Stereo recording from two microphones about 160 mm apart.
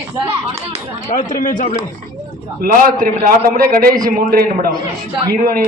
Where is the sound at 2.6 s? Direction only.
60° right (ahead or behind).